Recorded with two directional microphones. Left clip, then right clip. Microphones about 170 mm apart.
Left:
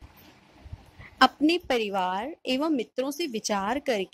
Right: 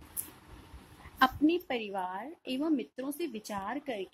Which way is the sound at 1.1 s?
40° left (ahead or behind).